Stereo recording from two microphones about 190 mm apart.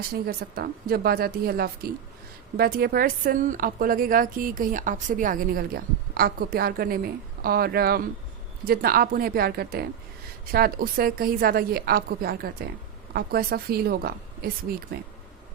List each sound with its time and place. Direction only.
0.1 s a woman's voice: 50° right (ahead or behind)